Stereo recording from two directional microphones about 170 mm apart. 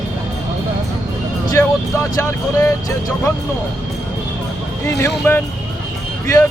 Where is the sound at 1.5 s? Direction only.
20° left (ahead or behind).